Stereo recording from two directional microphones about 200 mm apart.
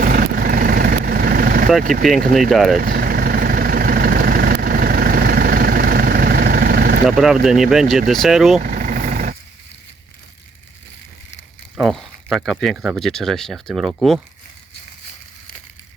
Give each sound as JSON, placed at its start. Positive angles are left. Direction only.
{"t": 0.0, "sound": "vehicle", "side_deg": -50}
{"t": 1.8, "sound": "speech", "side_deg": -40}
{"t": 2.5, "sound": "speech", "side_deg": 0}
{"t": 2.7, "sound": "vehicle", "side_deg": -45}
{"t": 7.4, "sound": "speech", "side_deg": 0}
{"t": 8.6, "sound": "vehicle", "side_deg": -45}
{"t": 11.8, "sound": "speech", "side_deg": 0}